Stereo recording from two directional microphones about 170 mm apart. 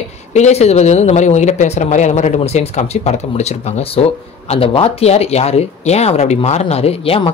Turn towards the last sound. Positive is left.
turn(degrees=35)  # may be behind; listen again after turning